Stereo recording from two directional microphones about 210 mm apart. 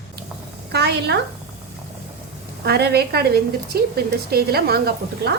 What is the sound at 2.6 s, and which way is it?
A woman's voice, 50° right (ahead or behind).